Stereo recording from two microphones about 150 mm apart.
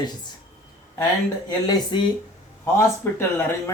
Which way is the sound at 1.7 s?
30° left (ahead or behind).